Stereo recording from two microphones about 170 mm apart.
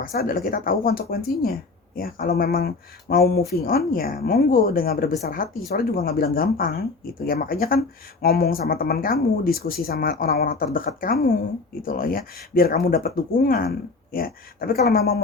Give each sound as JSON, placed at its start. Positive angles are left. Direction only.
{"t": 0.0, "sound": "speech", "side_deg": 60}